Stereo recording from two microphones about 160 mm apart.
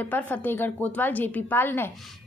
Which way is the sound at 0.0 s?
10° left (ahead or behind).